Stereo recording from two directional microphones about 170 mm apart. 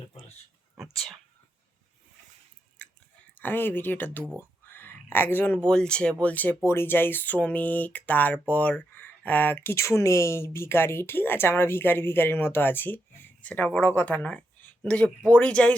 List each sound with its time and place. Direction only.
0.1 s a sound: 35° left (ahead or behind)
0.8 s whispering: centre (ahead or behind)
3.4 s speech: 10° left (ahead or behind)